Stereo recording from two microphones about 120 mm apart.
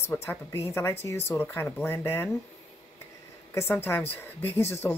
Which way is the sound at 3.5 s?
20° left (ahead or behind).